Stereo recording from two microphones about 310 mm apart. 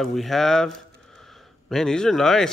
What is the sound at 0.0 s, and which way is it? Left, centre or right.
Speech, centre.